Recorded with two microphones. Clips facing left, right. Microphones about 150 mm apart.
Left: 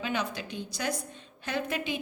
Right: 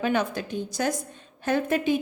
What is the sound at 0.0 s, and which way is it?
A woman's voice, 50° right (ahead or behind).